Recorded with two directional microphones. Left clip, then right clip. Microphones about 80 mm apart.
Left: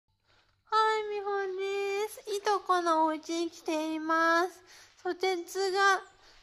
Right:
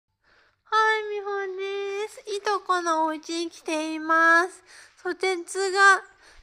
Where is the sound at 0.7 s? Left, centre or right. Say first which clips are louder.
Right 5 dB; right.